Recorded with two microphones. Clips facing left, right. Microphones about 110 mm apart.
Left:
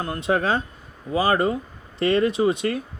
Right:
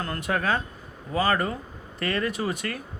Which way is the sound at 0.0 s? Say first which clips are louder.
Left 4 dB; 20° left (ahead or behind).